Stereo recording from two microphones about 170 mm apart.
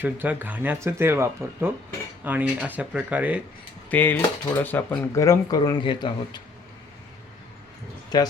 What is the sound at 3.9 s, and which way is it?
Speech, 10° left (ahead or behind).